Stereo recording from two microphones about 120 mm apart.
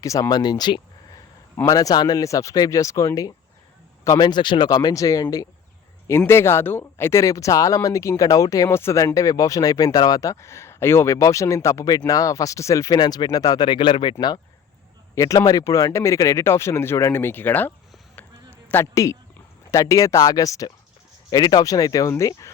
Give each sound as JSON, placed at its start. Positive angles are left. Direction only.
{"t": 0.0, "sound": "speech", "side_deg": 30}
{"t": 15.1, "sound": "speech", "side_deg": 25}
{"t": 18.2, "sound": "a sound", "side_deg": 15}
{"t": 19.7, "sound": "speech", "side_deg": 30}